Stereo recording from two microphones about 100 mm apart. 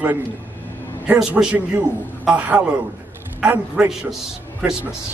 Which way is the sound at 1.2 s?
10° right (ahead or behind).